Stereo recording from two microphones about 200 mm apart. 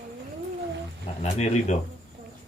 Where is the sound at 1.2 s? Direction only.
35° left (ahead or behind).